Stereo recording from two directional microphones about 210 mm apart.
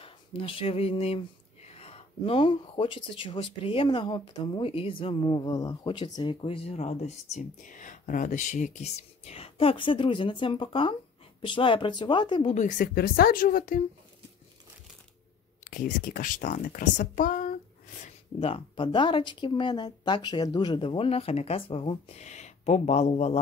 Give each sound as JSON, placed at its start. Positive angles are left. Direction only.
{"t": 0.0, "sound": "a woman's voice", "side_deg": 25}
{"t": 15.6, "sound": "a woman's voice", "side_deg": 40}
{"t": 18.0, "sound": "speech", "side_deg": 25}